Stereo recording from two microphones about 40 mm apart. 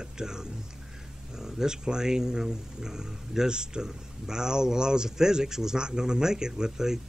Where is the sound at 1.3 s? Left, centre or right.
Centre.